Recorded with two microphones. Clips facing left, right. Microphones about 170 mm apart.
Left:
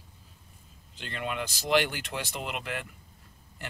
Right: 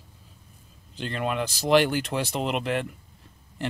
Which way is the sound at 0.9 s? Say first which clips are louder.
Right 6 dB; 35° right (ahead or behind).